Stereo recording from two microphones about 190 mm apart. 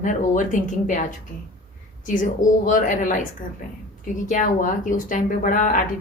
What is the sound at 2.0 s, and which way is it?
Speech, 45° left (ahead or behind).